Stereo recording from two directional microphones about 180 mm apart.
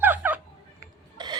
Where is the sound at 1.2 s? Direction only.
25° right (ahead or behind).